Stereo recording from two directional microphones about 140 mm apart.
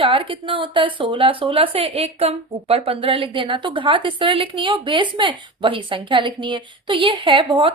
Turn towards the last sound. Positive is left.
turn(degrees=-35)  # may be behind; listen again after turning